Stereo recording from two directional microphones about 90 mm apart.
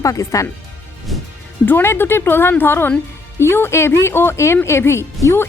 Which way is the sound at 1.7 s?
25° left (ahead or behind).